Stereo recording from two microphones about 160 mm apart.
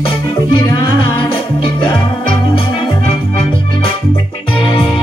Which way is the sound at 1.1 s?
35° left (ahead or behind).